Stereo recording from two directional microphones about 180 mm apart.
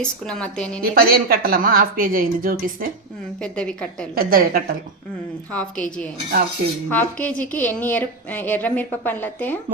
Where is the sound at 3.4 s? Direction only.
5° left (ahead or behind).